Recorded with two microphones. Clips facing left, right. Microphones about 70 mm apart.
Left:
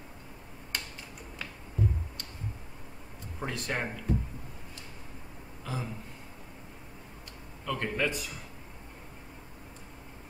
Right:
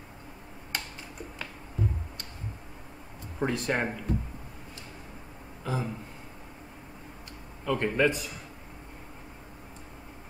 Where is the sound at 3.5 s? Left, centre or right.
Centre.